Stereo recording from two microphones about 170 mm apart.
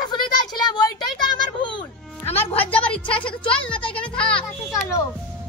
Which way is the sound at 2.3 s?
10° left (ahead or behind).